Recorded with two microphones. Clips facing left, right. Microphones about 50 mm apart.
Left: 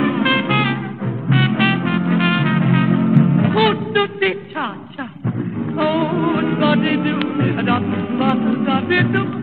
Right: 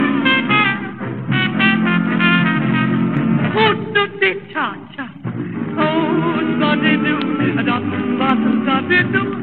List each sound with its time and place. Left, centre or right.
0.0 s music: centre
0.6 s music: right
1.3 s music: centre
3.1 s music: right
3.9 s a sound: centre
5.8 s music: centre
8.1 s music: right
8.4 s music: centre
8.8 s music: centre